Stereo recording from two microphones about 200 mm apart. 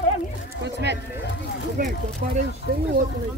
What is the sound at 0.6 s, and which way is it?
Speech, 60° right (ahead or behind).